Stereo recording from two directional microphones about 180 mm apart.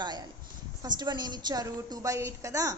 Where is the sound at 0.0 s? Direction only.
25° right (ahead or behind).